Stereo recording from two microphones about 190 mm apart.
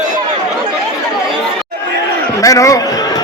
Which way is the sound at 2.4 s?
15° left (ahead or behind).